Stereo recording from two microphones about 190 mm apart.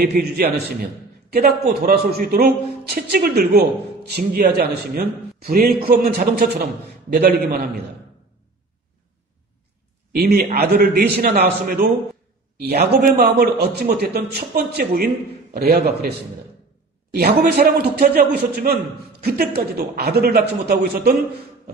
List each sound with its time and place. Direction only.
0.0 s a man's voice: 55° right (ahead or behind)
10.1 s a man's voice: 55° right (ahead or behind)
17.1 s a man's voice: 55° right (ahead or behind)